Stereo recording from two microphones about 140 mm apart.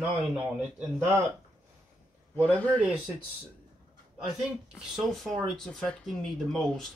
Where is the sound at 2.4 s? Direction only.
10° left (ahead or behind).